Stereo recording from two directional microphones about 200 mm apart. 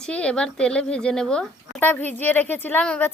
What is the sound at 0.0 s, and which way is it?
A woman's voice, 5° left (ahead or behind).